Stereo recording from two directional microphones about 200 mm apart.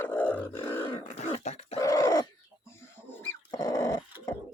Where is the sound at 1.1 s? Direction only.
35° left (ahead or behind).